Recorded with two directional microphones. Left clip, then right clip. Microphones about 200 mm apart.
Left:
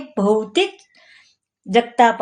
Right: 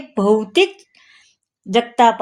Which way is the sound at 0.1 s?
30° right (ahead or behind).